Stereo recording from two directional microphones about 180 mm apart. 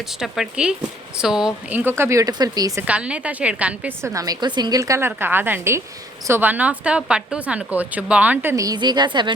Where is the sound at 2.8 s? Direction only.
5° right (ahead or behind).